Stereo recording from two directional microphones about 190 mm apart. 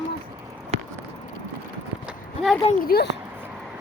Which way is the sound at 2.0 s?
Centre (ahead or behind).